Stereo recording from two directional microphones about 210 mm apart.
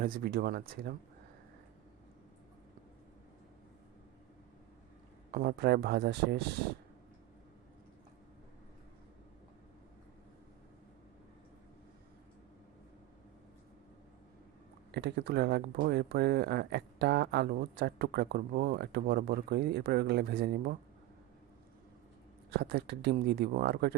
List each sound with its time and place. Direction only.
0.0 s speech: 45° right (ahead or behind)
5.3 s speech: 45° right (ahead or behind)
14.9 s speech: 55° right (ahead or behind)
22.5 s speech: 50° right (ahead or behind)